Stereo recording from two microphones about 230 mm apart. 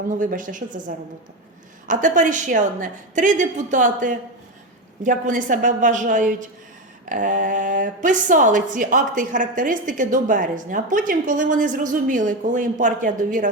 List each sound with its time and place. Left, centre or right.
0.1 s a woman's voice: right